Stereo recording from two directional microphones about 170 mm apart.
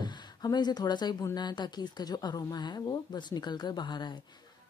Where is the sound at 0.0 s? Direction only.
25° left (ahead or behind).